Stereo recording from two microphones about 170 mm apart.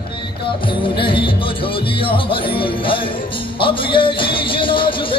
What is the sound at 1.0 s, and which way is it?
Music, 30° left (ahead or behind).